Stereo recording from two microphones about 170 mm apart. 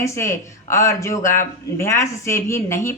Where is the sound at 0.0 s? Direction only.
15° left (ahead or behind).